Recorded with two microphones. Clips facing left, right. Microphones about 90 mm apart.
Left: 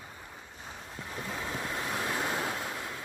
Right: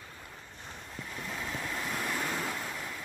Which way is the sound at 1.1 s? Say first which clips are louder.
Left 2 dB; 25° left (ahead or behind).